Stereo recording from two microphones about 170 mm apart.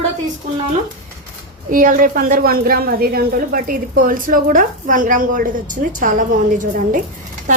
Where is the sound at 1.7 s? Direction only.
55° right (ahead or behind).